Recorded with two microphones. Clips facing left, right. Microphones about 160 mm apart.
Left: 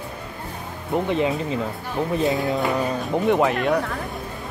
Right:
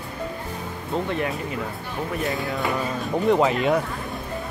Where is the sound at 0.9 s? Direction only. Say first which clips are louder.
Left 4 dB; 20° left (ahead or behind).